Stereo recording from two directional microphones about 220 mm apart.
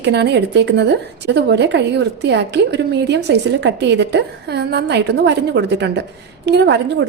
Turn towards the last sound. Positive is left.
turn(degrees=-50)  # may be behind; listen again after turning